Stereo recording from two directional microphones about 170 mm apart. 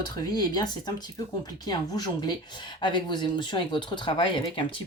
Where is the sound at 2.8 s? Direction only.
25° left (ahead or behind).